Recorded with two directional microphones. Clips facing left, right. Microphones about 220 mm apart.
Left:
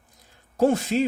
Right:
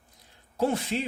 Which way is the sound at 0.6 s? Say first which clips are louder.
Left 7 dB; 45° left (ahead or behind).